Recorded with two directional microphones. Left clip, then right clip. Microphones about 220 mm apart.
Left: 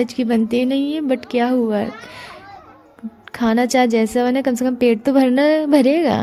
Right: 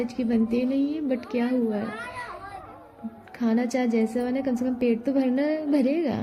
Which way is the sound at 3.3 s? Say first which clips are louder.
Left 10 dB; 45° left (ahead or behind).